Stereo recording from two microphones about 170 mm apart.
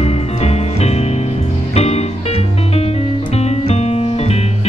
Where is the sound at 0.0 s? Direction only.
35° left (ahead or behind).